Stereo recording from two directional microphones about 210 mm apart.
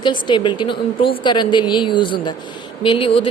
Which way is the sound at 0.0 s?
20° left (ahead or behind).